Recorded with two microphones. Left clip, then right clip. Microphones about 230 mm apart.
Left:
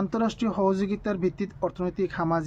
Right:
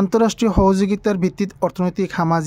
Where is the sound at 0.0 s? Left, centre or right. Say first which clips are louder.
Right 11 dB; right.